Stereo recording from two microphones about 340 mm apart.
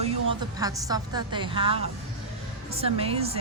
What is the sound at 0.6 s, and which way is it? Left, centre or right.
A woman's voice, centre.